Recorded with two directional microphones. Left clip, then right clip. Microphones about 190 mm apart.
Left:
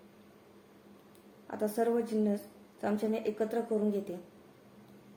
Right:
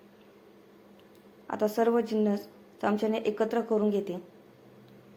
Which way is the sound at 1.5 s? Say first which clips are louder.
Right 5 dB; 25° right (ahead or behind).